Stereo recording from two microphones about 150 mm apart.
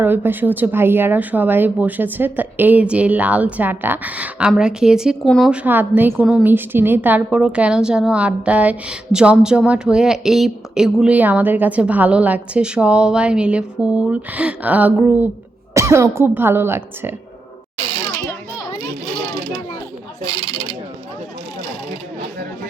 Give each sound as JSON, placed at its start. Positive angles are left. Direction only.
{"t": 0.0, "sound": "speech", "side_deg": -15}
{"t": 18.1, "sound": "children playing", "side_deg": 20}